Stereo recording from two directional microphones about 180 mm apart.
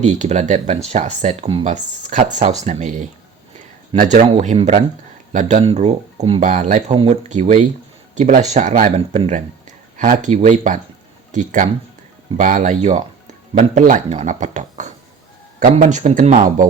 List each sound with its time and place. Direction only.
0.0 s speech: 40° right (ahead or behind)
4.3 s speech: 35° right (ahead or behind)
6.9 s speech: 30° right (ahead or behind)
7.3 s speech: 40° right (ahead or behind)